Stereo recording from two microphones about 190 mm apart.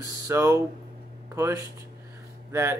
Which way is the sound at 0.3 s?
15° right (ahead or behind).